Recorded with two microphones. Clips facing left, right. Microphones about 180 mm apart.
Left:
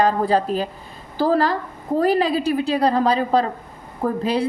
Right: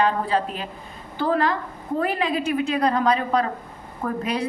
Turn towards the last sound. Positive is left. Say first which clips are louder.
# left 5 dB
turn(degrees=30)  # may be behind; listen again after turning